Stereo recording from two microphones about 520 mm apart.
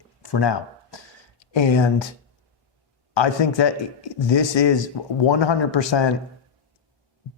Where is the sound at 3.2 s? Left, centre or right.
Left.